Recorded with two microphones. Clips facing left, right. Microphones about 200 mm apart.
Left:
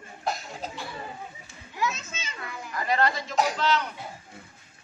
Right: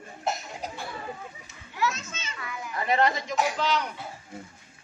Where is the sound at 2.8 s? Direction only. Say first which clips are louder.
Right 1 dB; 20° right (ahead or behind).